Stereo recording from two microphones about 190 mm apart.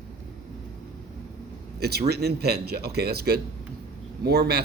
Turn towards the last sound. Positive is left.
turn(degrees=-55)  # may be behind; listen again after turning